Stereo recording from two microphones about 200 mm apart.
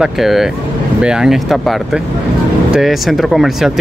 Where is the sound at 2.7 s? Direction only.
Centre (ahead or behind).